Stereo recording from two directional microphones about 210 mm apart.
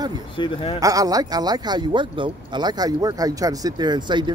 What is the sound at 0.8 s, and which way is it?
Speech, 15° right (ahead or behind).